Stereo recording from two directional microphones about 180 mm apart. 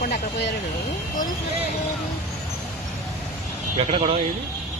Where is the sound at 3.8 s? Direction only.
30° right (ahead or behind).